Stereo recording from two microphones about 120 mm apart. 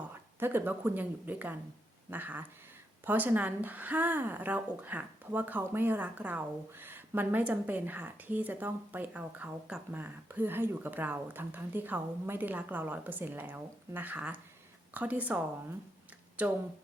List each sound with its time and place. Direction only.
0.1 s a woman's voice: 20° right (ahead or behind)
16.4 s a woman's voice: 10° right (ahead or behind)